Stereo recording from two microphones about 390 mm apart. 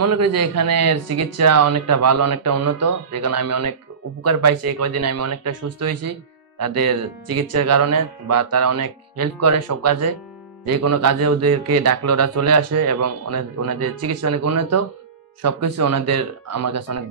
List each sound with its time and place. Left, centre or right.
0.0 s a man's voice: right
6.6 s a man's voice: right